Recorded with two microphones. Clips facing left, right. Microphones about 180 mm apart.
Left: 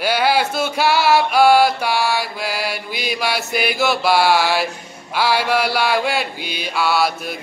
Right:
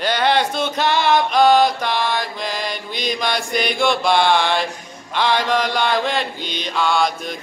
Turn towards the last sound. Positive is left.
turn(degrees=5)  # may be behind; listen again after turning